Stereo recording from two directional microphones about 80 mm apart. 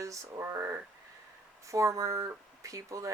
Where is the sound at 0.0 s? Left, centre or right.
Right.